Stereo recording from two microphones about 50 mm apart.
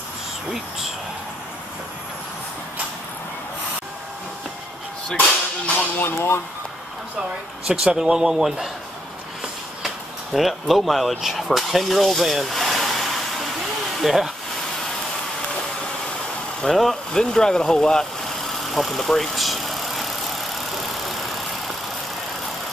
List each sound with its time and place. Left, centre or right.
5.9 s speech: left
7.6 s a man's voice: centre
9.8 s speech: centre
16.6 s speech: centre
17.1 s speech: centre
18.7 s vehicle: centre